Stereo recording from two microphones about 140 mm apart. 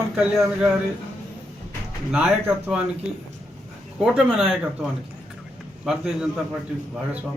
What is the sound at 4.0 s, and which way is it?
Speech, centre (ahead or behind).